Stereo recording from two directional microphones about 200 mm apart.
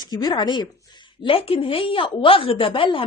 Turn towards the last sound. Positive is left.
turn(degrees=25)  # may be behind; listen again after turning